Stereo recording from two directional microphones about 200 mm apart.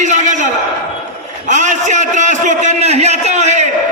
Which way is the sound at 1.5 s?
40° right (ahead or behind).